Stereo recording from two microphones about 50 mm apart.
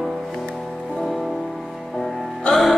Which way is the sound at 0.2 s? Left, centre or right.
Centre.